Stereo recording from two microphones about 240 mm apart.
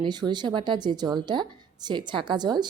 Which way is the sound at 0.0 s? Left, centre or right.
Centre.